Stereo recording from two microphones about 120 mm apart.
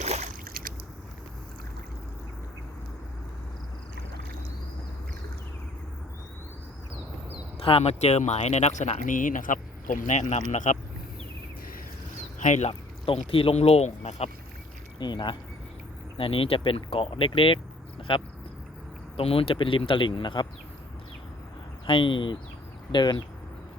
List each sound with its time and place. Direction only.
0.0 s a sound: 75° right (ahead or behind)
7.6 s speech: 55° left (ahead or behind); by 10.4 s 80° left
10.5 s speech: 90° left
12.4 s speech: 80° left
13.1 s speech: 50° left (ahead or behind); by 14.3 s 65° left (ahead or behind)
14.9 s speech: 40° left (ahead or behind)
21.8 s speech: 45° left (ahead or behind)